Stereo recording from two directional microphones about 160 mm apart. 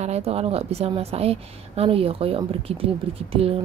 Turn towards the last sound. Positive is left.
turn(degrees=-35)  # may be behind; listen again after turning